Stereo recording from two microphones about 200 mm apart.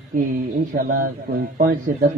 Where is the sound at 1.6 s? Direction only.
45° right (ahead or behind).